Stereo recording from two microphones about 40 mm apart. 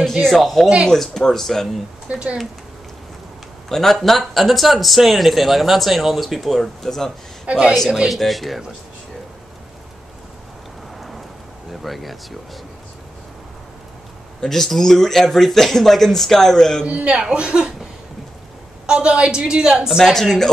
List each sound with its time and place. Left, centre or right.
0.4 s speech: centre
2.0 s speech: right
3.6 s speech: centre
6.6 s speech: centre
7.4 s speech: right
8.1 s speech: centre
11.0 s vehicle: centre
11.8 s speech: centre
14.4 s speech: centre
16.8 s a woman's voice: right
18.9 s a woman's voice: right
20.0 s speech: centre